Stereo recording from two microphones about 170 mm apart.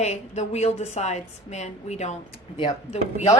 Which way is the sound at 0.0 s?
40° left (ahead or behind).